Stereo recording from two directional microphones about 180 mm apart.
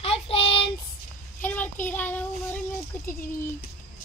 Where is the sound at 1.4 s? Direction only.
10° left (ahead or behind).